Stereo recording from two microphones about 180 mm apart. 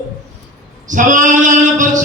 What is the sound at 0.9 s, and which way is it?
Male singing, 45° right (ahead or behind).